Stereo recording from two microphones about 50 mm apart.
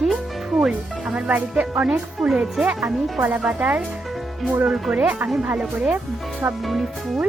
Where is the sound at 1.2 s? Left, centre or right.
Right.